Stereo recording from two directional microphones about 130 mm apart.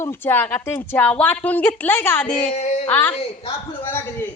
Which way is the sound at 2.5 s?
60° left (ahead or behind).